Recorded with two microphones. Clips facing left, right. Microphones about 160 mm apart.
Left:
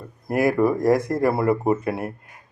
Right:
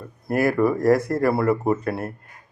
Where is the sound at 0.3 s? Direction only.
20° left (ahead or behind).